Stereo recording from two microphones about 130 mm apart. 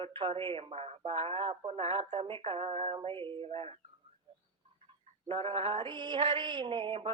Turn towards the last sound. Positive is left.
turn(degrees=-45)  # may be behind; listen again after turning